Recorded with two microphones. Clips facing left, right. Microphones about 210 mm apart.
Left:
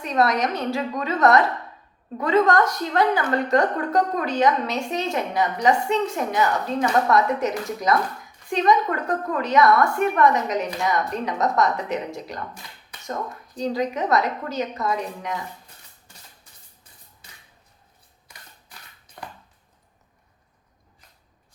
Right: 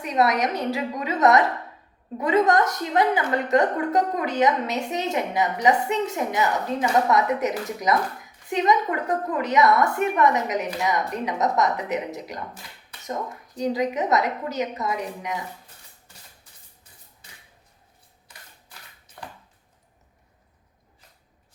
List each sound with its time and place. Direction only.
0.0 s a woman's voice: 15° right (ahead or behind)